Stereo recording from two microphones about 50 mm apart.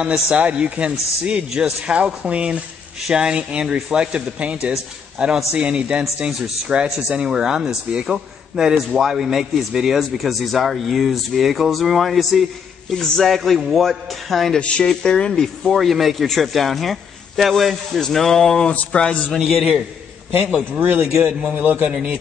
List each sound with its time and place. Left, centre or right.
0.0 s speech: right
7.1 s a man's voice: centre
14.6 s a man's voice: left
19.3 s a man's voice: centre
20.8 s a man's voice: right
21.3 s a man's voice: centre
21.5 s a man's voice: right